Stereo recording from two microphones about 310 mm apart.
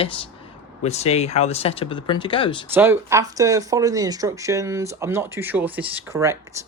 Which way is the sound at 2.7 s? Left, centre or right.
Centre.